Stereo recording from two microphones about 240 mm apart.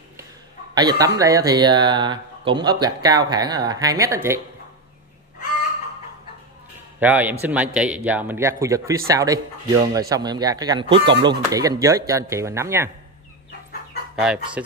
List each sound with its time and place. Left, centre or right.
0.7 s speech: centre
7.0 s speech: centre
14.1 s speech: centre